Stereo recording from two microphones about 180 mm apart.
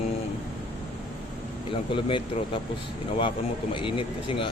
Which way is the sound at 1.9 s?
30° left (ahead or behind).